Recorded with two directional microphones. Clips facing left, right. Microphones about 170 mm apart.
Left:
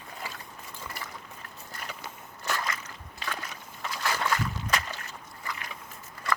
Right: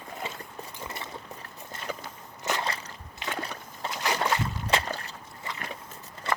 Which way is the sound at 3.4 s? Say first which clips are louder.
Right 5 dB; 30° right (ahead or behind).